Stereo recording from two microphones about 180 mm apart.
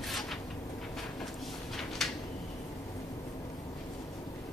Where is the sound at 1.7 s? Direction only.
Centre (ahead or behind).